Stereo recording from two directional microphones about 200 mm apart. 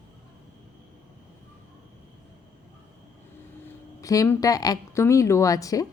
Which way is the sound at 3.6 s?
15° left (ahead or behind).